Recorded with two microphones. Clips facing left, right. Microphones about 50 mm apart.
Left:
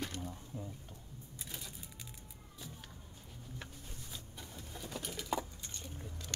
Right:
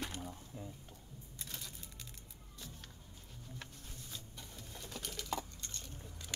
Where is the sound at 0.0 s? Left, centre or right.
Centre.